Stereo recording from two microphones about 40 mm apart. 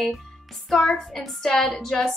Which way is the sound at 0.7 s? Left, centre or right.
Centre.